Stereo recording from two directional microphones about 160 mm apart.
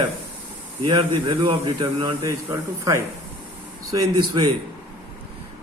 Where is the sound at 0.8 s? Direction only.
35° right (ahead or behind).